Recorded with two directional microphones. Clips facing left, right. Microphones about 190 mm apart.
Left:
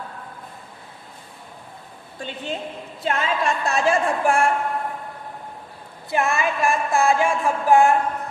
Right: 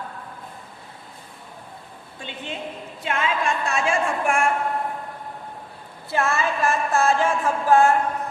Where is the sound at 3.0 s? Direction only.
35° left (ahead or behind).